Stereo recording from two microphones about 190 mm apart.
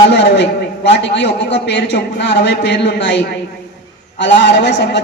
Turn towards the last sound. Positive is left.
turn(degrees=65)  # may be behind; listen again after turning